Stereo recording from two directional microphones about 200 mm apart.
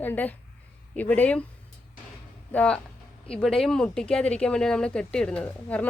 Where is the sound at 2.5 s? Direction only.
5° left (ahead or behind).